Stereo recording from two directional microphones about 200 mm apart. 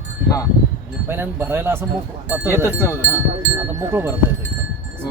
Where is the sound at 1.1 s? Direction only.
10° right (ahead or behind).